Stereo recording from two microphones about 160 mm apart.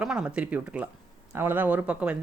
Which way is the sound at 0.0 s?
5° right (ahead or behind).